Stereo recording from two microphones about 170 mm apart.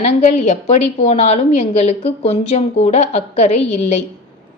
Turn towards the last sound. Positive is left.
turn(degrees=40)  # may be behind; listen again after turning